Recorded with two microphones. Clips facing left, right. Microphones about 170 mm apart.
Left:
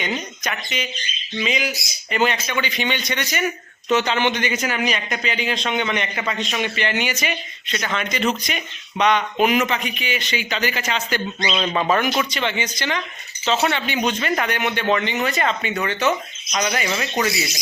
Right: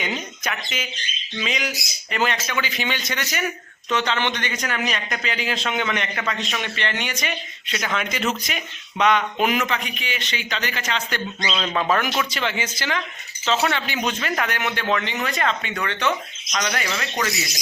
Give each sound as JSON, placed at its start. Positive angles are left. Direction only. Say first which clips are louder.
{"t": 0.0, "sound": "a man's voice", "louder": "left 2 dB", "side_deg": -5}
{"t": 3.8, "sound": "a man's voice", "louder": "left 4 dB", "side_deg": 10}